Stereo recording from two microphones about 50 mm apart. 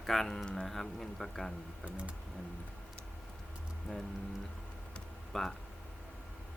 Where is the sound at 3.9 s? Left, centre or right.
Centre.